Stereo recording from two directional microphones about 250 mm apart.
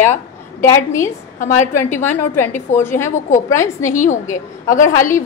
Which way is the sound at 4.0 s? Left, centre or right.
Left.